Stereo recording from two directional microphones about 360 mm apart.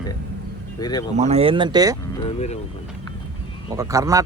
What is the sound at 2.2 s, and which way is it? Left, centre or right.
Speech, centre.